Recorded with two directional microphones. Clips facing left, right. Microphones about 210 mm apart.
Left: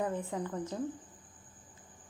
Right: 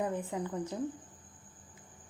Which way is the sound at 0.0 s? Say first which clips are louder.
Even; 15° right (ahead or behind).